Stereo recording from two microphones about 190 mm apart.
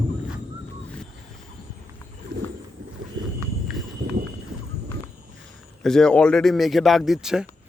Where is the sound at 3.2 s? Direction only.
80° right.